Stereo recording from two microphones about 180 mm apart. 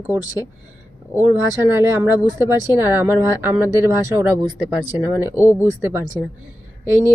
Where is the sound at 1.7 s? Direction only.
15° right (ahead or behind).